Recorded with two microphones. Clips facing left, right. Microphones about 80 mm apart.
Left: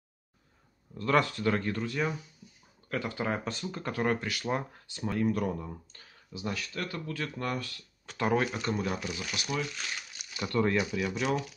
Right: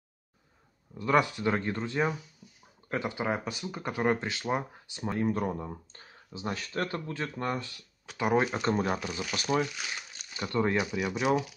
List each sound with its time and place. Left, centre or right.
0.9 s speech: centre
8.1 s speech: centre
8.5 s speech: right
9.8 s speech: centre